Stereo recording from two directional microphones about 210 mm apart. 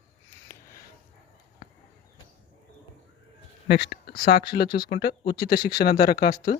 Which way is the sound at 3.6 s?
50° left (ahead or behind).